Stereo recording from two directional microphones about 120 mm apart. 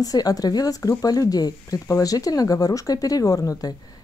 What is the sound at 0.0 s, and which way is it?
Speech, 30° left (ahead or behind).